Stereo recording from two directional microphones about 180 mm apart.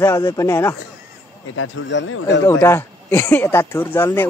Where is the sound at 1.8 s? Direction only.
85° left.